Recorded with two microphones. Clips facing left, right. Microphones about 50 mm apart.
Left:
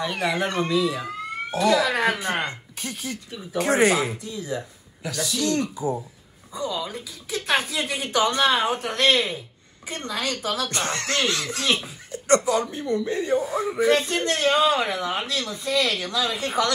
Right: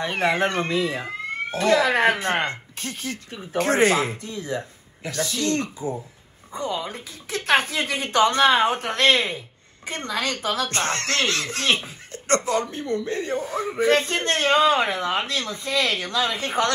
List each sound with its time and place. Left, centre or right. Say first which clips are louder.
0.0 s a man's voice: right 3 dB; right
5.8 s speech: left 2 dB; left
6.5 s a man's voice: right 1 dB; right